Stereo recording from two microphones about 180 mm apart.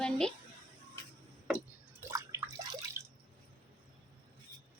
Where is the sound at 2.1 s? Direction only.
15° right (ahead or behind).